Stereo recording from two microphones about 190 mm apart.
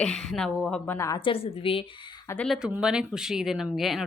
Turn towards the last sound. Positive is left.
turn(degrees=0)  # may be behind; listen again after turning